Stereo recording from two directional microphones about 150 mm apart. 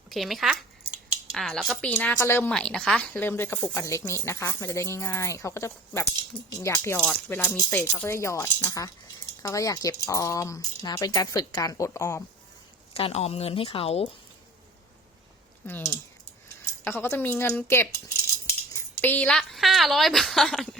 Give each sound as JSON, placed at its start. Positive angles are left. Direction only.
{"t": 0.1, "sound": "speech", "side_deg": 0}
{"t": 12.9, "sound": "speech", "side_deg": 40}
{"t": 15.6, "sound": "speech", "side_deg": 15}
{"t": 19.0, "sound": "speech", "side_deg": 10}